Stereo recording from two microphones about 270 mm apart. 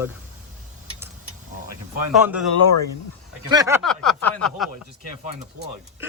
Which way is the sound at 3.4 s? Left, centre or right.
Centre.